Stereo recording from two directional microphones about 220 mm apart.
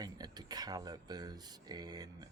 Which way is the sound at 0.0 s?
20° right (ahead or behind).